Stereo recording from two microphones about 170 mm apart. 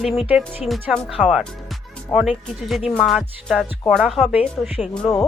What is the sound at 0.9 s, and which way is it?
Speech, centre (ahead or behind).